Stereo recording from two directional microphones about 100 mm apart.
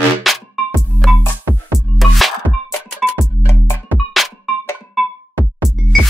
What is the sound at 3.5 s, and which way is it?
Music, 25° left (ahead or behind).